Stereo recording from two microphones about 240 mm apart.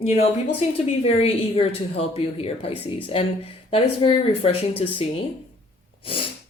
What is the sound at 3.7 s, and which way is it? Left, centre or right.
Speech, left.